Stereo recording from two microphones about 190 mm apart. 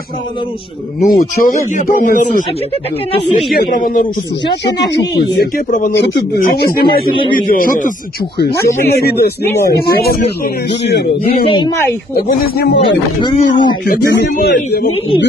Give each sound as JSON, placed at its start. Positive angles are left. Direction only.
{"t": 1.0, "sound": "speech", "side_deg": 45}
{"t": 3.5, "sound": "speech", "side_deg": 45}
{"t": 5.7, "sound": "speech", "side_deg": 45}
{"t": 5.9, "sound": "a man's voice", "side_deg": 65}
{"t": 11.4, "sound": "speech", "side_deg": 25}
{"t": 12.3, "sound": "a man's voice", "side_deg": 55}
{"t": 12.8, "sound": "speech", "side_deg": 25}
{"t": 13.8, "sound": "a man's voice", "side_deg": 55}